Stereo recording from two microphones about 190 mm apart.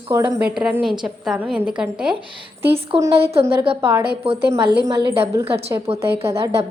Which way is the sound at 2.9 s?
30° right (ahead or behind).